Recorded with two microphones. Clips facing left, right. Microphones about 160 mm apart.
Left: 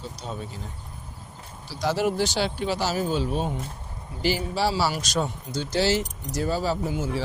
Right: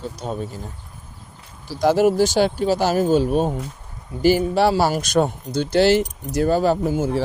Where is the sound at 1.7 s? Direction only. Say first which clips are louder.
Right 8 dB; 50° right (ahead or behind).